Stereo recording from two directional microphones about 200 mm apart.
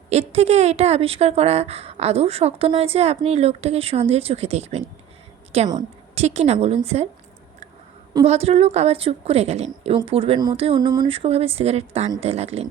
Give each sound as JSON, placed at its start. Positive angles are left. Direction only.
{"t": 0.1, "sound": "a woman's voice", "side_deg": -30}
{"t": 8.2, "sound": "a woman's voice", "side_deg": -30}